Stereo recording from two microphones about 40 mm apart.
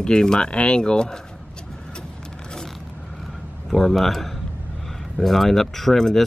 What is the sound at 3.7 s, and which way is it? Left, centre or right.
A man's voice, centre.